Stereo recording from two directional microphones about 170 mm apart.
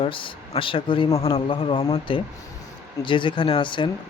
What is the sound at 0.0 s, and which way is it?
Speech, 30° left (ahead or behind).